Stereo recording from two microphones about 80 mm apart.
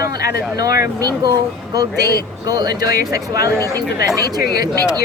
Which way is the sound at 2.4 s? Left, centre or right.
Right.